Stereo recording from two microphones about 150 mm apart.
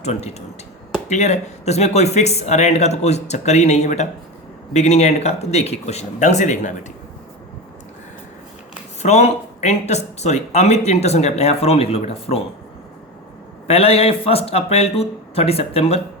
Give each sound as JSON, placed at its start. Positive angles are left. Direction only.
{"t": 0.0, "sound": "speech", "side_deg": 45}
{"t": 9.0, "sound": "speech", "side_deg": 50}
{"t": 13.7, "sound": "speech", "side_deg": 40}